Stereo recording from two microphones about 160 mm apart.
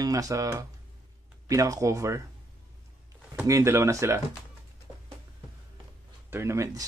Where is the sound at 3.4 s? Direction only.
20° right (ahead or behind).